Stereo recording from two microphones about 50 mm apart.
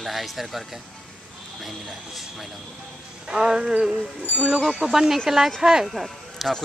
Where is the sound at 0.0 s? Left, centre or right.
Centre.